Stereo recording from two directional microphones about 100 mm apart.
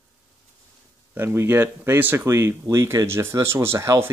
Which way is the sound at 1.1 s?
25° right (ahead or behind).